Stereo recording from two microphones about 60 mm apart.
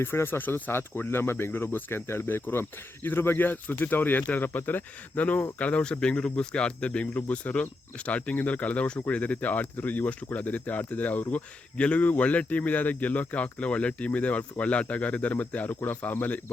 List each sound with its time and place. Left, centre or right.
0.0 s speech: left